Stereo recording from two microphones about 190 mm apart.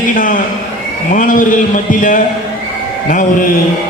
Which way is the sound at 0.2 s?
45° left (ahead or behind).